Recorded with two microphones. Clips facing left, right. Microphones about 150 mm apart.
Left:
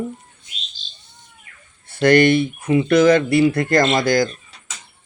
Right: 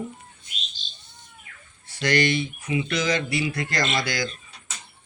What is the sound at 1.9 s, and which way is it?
Speech, 55° left (ahead or behind).